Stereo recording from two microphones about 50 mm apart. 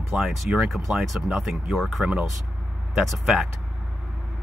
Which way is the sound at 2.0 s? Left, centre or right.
Right.